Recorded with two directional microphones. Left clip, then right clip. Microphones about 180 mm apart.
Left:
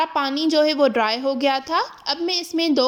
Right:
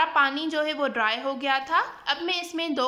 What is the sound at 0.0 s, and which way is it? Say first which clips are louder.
A woman's voice: left 1 dB; 25° left (ahead or behind).